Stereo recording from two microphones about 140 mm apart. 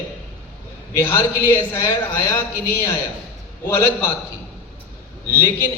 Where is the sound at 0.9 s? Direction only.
15° left (ahead or behind).